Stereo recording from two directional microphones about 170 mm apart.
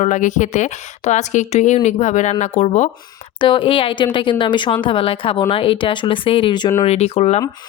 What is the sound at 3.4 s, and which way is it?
Speech, 30° left (ahead or behind).